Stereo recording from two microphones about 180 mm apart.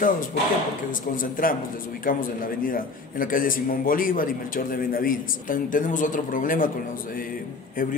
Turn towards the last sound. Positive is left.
turn(degrees=50)  # may be behind; listen again after turning